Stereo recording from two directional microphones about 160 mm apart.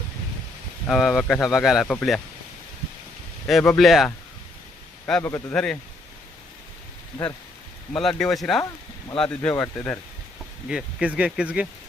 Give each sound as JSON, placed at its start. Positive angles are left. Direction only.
{"t": 0.9, "sound": "speech", "side_deg": 0}
{"t": 3.4, "sound": "speech", "side_deg": 5}
{"t": 5.2, "sound": "speech", "side_deg": 15}
{"t": 7.9, "sound": "speech", "side_deg": 5}
{"t": 10.7, "sound": "speech", "side_deg": -5}